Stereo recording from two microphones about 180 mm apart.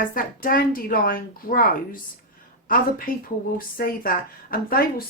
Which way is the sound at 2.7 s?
50° left (ahead or behind).